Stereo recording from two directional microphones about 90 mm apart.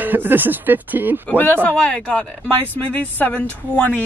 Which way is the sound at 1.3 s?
20° left (ahead or behind).